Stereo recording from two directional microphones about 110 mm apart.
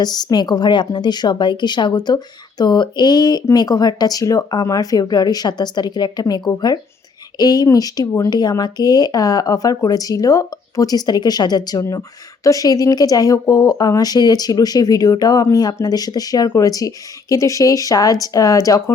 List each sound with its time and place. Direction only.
0.0 s speech: 40° left (ahead or behind)